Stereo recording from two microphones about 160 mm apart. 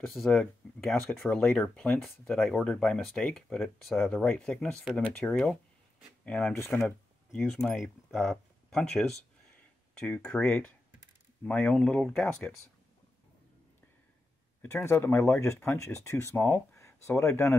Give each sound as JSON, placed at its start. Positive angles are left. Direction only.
{"t": 0.1, "sound": "speech", "side_deg": 0}
{"t": 9.9, "sound": "speech", "side_deg": 5}
{"t": 14.6, "sound": "speech", "side_deg": 15}